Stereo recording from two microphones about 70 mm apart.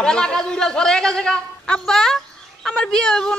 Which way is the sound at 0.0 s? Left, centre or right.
Centre.